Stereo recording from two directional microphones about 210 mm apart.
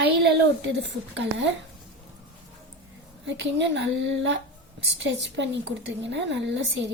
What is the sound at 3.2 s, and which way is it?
A woman's voice, 60° right (ahead or behind).